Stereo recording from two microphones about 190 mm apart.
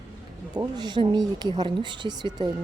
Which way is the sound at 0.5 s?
20° right (ahead or behind).